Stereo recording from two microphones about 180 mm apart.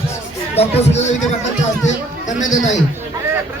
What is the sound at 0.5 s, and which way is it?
Speech, 35° left (ahead or behind).